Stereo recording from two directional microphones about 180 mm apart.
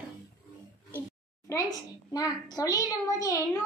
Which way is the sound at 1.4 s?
20° left (ahead or behind).